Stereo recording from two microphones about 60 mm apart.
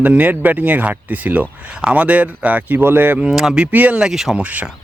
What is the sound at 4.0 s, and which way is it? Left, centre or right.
Speech, centre.